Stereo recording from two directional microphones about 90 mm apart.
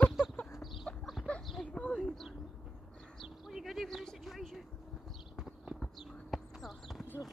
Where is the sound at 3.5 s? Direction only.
Centre (ahead or behind).